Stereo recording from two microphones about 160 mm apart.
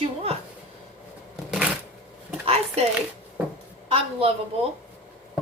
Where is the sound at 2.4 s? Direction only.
40° right (ahead or behind).